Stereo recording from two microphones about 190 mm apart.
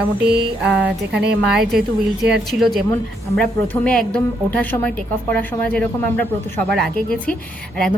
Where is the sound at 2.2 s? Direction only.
Centre (ahead or behind).